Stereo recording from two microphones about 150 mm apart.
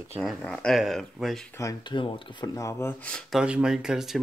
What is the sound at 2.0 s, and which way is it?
Speech, 35° left (ahead or behind).